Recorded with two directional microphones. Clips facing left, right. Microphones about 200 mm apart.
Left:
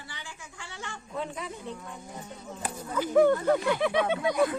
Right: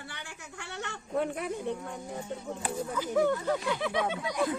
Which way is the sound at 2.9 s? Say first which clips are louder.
Left 6 dB; 60° left (ahead or behind).